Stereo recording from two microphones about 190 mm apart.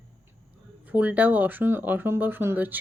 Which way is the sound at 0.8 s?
10° right (ahead or behind).